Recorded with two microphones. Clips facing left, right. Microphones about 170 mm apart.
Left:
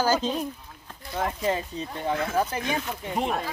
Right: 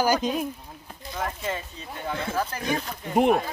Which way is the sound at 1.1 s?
30° left (ahead or behind).